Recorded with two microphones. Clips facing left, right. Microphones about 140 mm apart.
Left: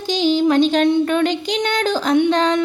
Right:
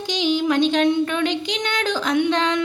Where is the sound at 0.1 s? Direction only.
35° left (ahead or behind).